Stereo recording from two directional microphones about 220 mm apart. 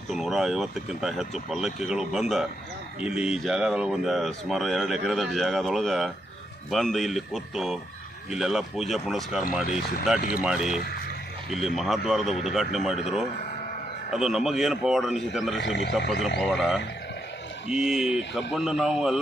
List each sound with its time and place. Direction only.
0.1 s speech: centre (ahead or behind)
15.5 s speech: 55° left (ahead or behind)
15.9 s speech: centre (ahead or behind)